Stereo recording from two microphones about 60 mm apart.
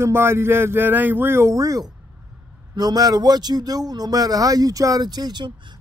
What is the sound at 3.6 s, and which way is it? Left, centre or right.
Speech, right.